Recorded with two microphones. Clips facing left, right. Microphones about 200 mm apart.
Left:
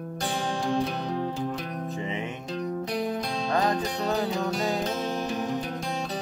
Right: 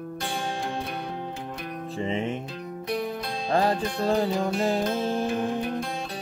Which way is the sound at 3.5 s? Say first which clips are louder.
Right 3 dB; 30° right (ahead or behind).